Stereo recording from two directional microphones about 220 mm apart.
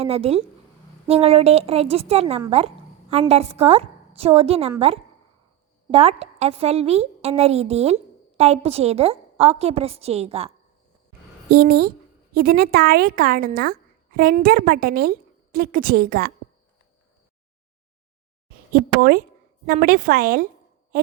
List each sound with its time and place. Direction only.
0.0 s a woman's voice: 25° right (ahead or behind)
5.9 s a woman's voice: 25° right (ahead or behind)
11.6 s a woman's voice: 45° right (ahead or behind)
18.4 s a sound: 40° right (ahead or behind)
19.6 s a woman's voice: 40° right (ahead or behind)